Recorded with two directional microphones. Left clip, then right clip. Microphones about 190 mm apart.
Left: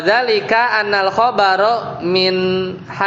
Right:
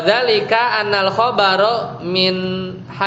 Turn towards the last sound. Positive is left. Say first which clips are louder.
# left 6 dB
turn(degrees=20)  # may be behind; listen again after turning